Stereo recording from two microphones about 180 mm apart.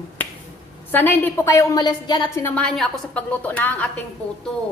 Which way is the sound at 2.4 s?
5° left (ahead or behind).